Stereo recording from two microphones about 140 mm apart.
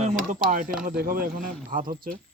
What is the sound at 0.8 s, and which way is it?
Speech, 90° right.